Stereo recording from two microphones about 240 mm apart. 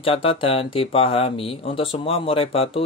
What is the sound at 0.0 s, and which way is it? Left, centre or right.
Speech, left.